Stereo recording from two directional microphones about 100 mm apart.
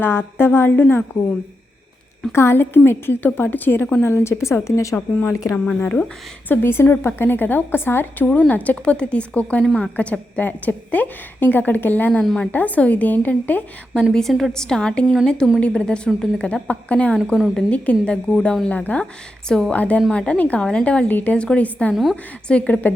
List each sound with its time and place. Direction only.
0.0 s a woman's voice: 20° left (ahead or behind)
2.3 s a woman's voice: 25° left (ahead or behind)
5.8 s a woman's voice: 20° left (ahead or behind)
9.6 s a woman's voice: centre (ahead or behind)
9.9 s a woman's voice: 15° left (ahead or behind)
14.0 s a woman's voice: 5° left (ahead or behind)
17.3 s a woman's voice: centre (ahead or behind)
17.7 s a woman's voice: 10° left (ahead or behind)